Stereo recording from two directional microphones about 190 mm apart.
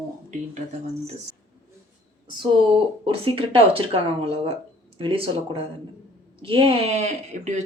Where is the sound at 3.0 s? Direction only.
30° right (ahead or behind).